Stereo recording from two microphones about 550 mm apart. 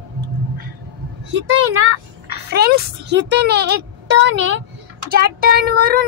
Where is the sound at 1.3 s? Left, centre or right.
Right.